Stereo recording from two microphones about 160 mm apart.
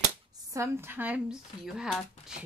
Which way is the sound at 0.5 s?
15° right (ahead or behind).